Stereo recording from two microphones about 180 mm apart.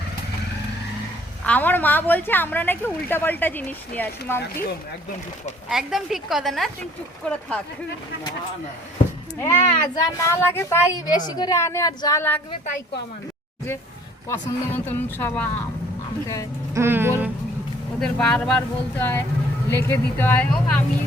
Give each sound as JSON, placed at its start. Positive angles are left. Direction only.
{"t": 1.5, "sound": "a woman's voice", "side_deg": 10}
{"t": 5.6, "sound": "speech", "side_deg": 0}
{"t": 9.4, "sound": "a woman's voice", "side_deg": 15}
{"t": 14.3, "sound": "a woman's voice", "side_deg": 10}
{"t": 16.7, "sound": "speech", "side_deg": -15}
{"t": 18.0, "sound": "a woman's voice", "side_deg": 5}